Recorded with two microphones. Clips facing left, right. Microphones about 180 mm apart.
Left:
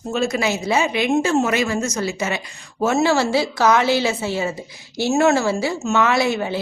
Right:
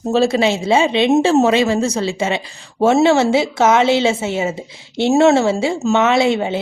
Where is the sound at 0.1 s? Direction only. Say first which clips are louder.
Right 6 dB; 30° right (ahead or behind).